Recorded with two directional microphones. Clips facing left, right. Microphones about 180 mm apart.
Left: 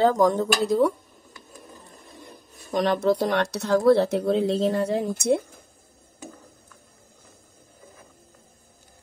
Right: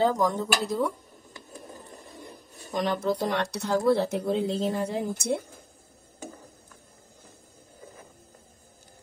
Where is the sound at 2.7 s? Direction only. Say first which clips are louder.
Left 5 dB; 80° left.